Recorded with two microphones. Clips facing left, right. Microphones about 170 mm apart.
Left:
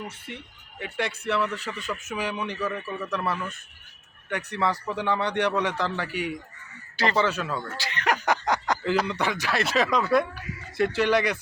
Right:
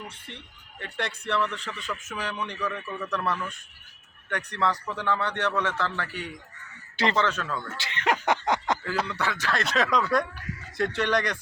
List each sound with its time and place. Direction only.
0.1 s speech: 10° left (ahead or behind)
6.9 s speech: 25° right (ahead or behind)
7.2 s speech: 10° left (ahead or behind)
7.8 s a sound: 25° right (ahead or behind)
9.0 s speech: 15° left (ahead or behind)